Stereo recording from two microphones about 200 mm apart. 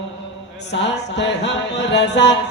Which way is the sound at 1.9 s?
60° left (ahead or behind).